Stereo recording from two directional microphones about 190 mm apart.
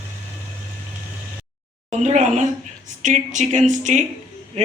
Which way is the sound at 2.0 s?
40° right (ahead or behind).